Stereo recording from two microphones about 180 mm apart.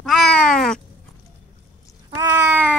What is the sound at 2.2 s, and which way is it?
Cat, 20° right (ahead or behind).